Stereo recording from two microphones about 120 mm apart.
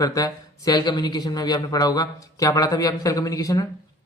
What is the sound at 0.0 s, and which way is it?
Speech, 30° left (ahead or behind).